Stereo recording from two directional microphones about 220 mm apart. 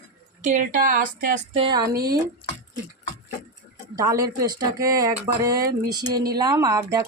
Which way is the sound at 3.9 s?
15° right (ahead or behind).